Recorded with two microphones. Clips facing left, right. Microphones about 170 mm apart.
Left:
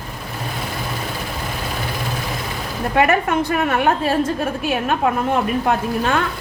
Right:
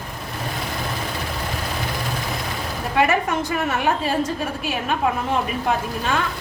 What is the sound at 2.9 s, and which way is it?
A woman's voice, 55° left (ahead or behind).